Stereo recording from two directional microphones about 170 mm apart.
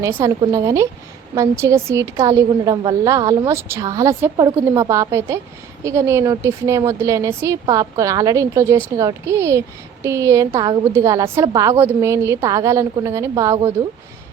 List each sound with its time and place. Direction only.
0.0 s a child's voice: 15° right (ahead or behind)